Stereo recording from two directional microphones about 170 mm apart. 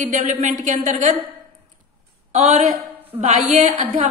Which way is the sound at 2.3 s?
40° right (ahead or behind).